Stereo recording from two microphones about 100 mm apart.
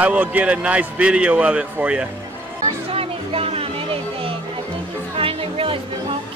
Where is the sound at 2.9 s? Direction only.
75° right (ahead or behind).